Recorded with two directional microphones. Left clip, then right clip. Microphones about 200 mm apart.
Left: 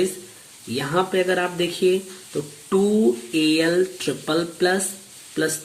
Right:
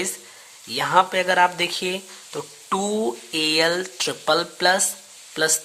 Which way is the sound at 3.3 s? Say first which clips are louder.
Right 1 dB; 45° right (ahead or behind).